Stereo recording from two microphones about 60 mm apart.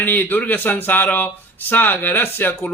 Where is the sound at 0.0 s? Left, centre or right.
Left.